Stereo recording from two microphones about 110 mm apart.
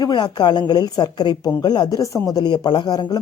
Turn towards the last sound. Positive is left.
turn(degrees=40)  # may be behind; listen again after turning